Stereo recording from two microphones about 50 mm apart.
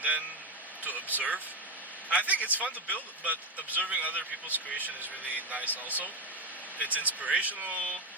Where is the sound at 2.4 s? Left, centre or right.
Right.